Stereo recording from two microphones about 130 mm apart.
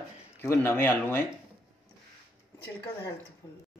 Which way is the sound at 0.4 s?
20° left (ahead or behind).